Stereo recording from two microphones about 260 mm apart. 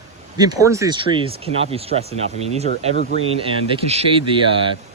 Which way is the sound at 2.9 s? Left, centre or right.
Right.